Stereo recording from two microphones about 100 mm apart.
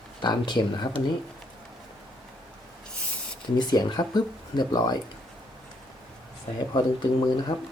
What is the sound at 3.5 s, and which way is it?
Speech, 45° left (ahead or behind).